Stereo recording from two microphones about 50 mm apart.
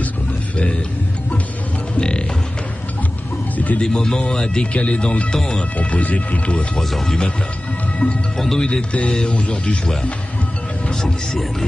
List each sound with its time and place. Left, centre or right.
2.0 s music: centre
3.5 s a sound: left
3.8 s speech: centre
5.3 s speech: centre
5.8 s speech: left
6.8 s speech: centre
8.0 s speech: left
8.4 s speech: centre
9.3 s speech: left
10.9 s speech: centre